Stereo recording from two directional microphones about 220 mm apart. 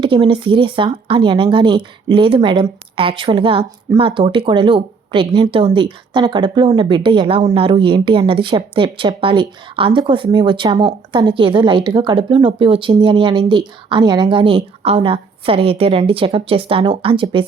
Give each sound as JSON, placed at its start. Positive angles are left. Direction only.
{"t": 0.0, "sound": "speech", "side_deg": -25}